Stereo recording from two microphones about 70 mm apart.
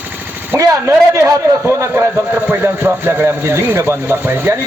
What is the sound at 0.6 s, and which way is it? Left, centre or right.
A man's voice, right.